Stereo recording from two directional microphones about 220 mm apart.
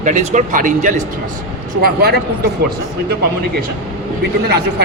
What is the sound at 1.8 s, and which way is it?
Speech, 45° right (ahead or behind).